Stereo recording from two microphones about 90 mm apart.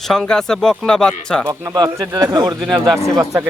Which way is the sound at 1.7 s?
50° right (ahead or behind).